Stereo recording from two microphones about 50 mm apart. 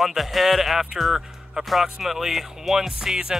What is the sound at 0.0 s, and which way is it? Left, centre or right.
Speech, centre.